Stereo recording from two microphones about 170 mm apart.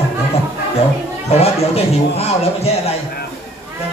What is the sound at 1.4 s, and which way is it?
Speech, 35° left (ahead or behind).